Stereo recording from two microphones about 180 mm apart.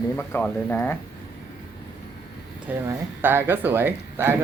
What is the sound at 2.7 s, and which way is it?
Speech, 10° right (ahead or behind).